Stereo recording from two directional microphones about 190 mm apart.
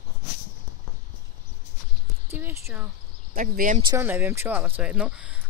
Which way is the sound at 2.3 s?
10° right (ahead or behind).